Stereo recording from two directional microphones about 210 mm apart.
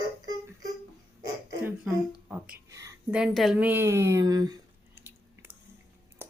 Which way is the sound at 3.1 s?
Centre (ahead or behind).